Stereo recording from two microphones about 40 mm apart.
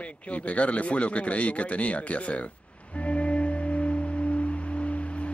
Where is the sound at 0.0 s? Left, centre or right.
Left.